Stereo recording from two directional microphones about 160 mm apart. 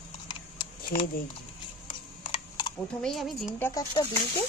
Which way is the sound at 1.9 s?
30° left (ahead or behind).